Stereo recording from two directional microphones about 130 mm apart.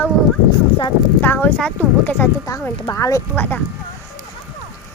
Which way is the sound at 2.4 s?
25° left (ahead or behind).